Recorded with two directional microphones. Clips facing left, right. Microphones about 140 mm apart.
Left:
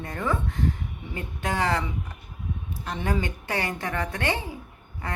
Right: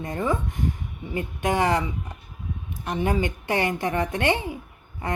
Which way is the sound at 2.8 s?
15° right (ahead or behind).